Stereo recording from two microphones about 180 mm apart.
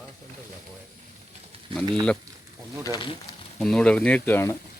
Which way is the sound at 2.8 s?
25° left (ahead or behind).